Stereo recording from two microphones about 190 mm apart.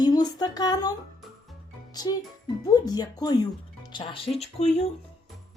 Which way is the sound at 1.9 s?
20° left (ahead or behind).